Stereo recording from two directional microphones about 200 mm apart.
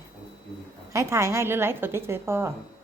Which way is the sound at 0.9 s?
15° right (ahead or behind).